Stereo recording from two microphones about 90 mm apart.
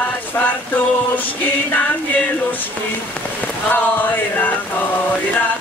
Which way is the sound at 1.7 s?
15° left (ahead or behind).